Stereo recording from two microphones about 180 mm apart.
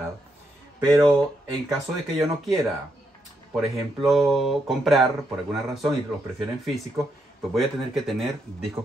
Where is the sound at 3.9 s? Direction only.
Centre (ahead or behind).